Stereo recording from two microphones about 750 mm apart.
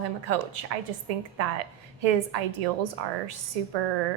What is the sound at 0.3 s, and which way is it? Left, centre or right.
A woman's voice, right.